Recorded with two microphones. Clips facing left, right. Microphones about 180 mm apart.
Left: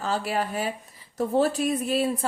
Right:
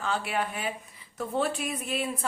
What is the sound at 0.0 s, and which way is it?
A woman's voice, 35° left (ahead or behind).